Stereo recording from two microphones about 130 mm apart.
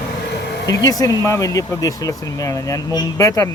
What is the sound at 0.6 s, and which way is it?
Speech, 30° left (ahead or behind).